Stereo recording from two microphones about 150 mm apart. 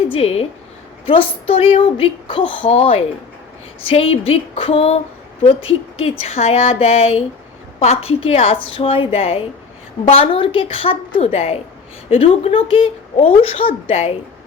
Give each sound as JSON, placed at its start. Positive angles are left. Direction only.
{"t": 0.1, "sound": "speech", "side_deg": 40}
{"t": 6.0, "sound": "speech", "side_deg": 45}